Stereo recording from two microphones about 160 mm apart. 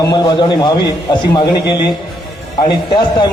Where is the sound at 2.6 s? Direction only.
30° left (ahead or behind).